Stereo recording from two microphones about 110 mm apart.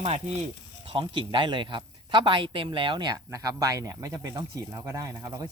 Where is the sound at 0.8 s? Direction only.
50° right (ahead or behind).